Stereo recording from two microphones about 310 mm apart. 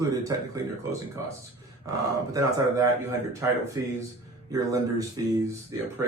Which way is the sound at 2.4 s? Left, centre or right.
Centre.